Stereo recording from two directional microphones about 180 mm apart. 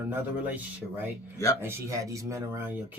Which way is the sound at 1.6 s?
15° right (ahead or behind).